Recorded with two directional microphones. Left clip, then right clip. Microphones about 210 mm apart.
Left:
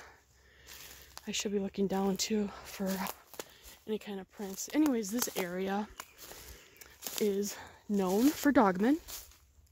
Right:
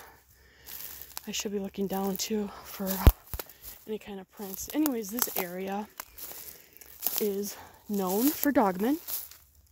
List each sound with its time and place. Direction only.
0.7 s a sound: 50° right (ahead or behind)
1.2 s speech: 10° left (ahead or behind)
2.8 s a sound: 50° right (ahead or behind)
3.8 s speech: 15° left (ahead or behind)
5.2 s speech: 45° right (ahead or behind)
5.5 s speech: 20° left (ahead or behind)
5.9 s crumpling: 50° right (ahead or behind)
7.0 s a sound: 50° right (ahead or behind)
7.2 s speech: 15° left (ahead or behind)
9.1 s frying: 50° right (ahead or behind)